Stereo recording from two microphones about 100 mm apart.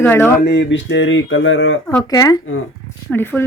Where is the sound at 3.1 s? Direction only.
20° left (ahead or behind).